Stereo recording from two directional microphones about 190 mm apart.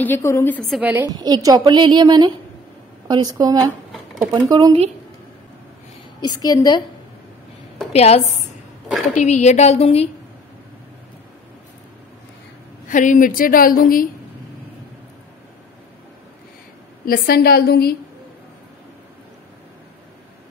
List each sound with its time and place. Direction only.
0.0 s a woman's voice: 15° left (ahead or behind); by 4.7 s 20° right (ahead or behind)
6.2 s a woman's voice: 20° left (ahead or behind)
7.9 s a woman's voice: 35° left (ahead or behind)
12.8 s a woman's voice: 45° left (ahead or behind)
17.0 s a woman's voice: 50° left (ahead or behind)